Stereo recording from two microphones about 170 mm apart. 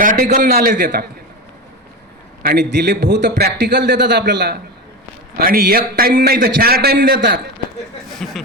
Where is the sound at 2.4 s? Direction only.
75° right (ahead or behind); by 3.3 s 90° right.